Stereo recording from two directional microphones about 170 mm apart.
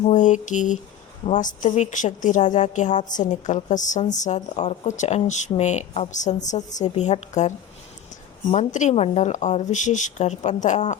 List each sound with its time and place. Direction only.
0.0 s a woman's voice: 45° left (ahead or behind)